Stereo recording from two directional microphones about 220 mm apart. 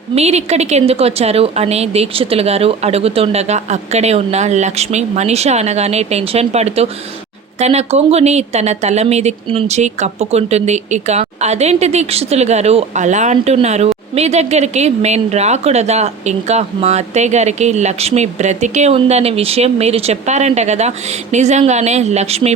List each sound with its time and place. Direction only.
0.1 s a woman's voice: 30° right (ahead or behind)